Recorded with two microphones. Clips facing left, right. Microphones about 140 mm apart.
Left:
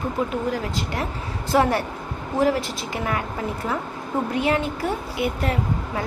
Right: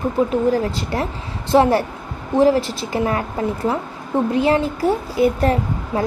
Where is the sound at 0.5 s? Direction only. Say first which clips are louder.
Right 6 dB; 35° right (ahead or behind).